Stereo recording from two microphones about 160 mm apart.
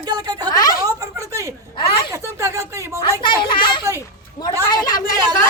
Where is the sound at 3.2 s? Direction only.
30° left (ahead or behind).